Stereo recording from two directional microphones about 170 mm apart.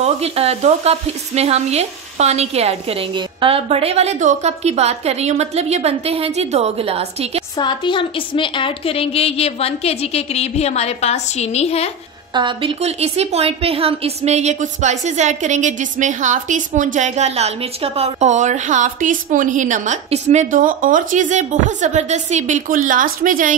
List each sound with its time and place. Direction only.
0.0 s speech: 35° right (ahead or behind)
7.5 s a woman's voice: 25° left (ahead or behind)
12.4 s a woman's voice: 30° right (ahead or behind); by 23.5 s 55° right (ahead or behind)